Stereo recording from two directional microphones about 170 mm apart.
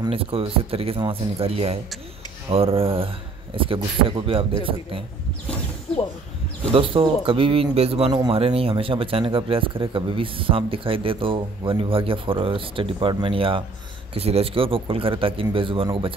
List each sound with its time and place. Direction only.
0.0 s speech: 35° right (ahead or behind)
6.7 s speech: 30° right (ahead or behind)